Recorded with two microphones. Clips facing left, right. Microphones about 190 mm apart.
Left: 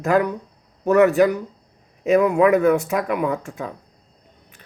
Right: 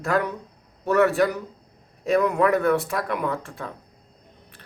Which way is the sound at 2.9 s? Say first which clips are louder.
Left 5 dB; 10° left (ahead or behind).